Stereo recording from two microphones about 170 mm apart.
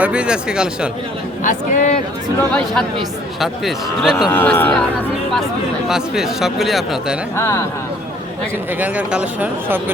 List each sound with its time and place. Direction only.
0.0 s speech: 5° right (ahead or behind)
1.5 s speech: 45° left (ahead or behind)
2.5 s speech: 5° left (ahead or behind)
4.3 s speech: 10° left (ahead or behind)
5.9 s speech: centre (ahead or behind)
7.3 s speech: 15° left (ahead or behind)
8.8 s speech: 5° right (ahead or behind)